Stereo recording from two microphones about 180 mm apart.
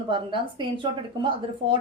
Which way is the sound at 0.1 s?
25° right (ahead or behind).